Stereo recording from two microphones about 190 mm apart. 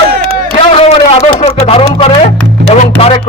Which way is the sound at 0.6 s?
30° left (ahead or behind).